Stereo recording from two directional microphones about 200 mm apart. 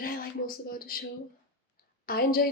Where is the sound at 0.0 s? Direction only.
45° left (ahead or behind).